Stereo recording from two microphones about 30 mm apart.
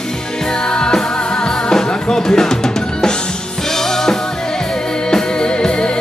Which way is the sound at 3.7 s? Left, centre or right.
Centre.